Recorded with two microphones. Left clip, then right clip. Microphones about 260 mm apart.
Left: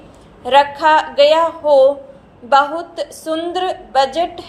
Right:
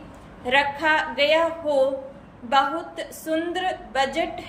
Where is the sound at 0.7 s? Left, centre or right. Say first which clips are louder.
Left 9 dB; centre.